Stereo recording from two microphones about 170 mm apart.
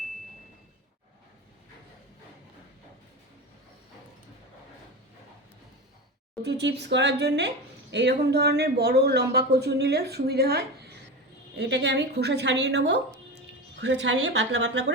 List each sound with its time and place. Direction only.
6.4 s speech: 90° right; by 10.6 s 70° right (ahead or behind)
11.5 s a woman's voice: 85° right